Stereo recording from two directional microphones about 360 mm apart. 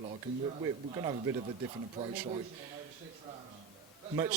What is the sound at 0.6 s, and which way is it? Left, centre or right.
Speech, centre.